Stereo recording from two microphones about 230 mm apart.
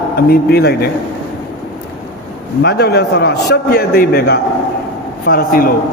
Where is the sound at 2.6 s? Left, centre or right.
Left.